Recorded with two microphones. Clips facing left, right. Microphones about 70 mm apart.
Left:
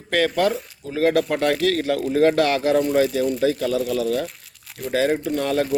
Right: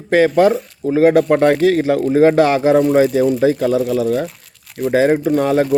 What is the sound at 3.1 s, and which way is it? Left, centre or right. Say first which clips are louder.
Speech: right 7 dB; centre.